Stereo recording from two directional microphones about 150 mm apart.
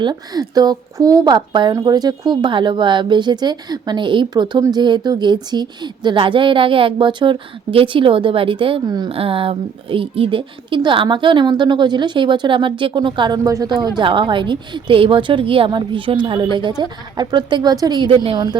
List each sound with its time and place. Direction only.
0.0 s speech: 30° right (ahead or behind)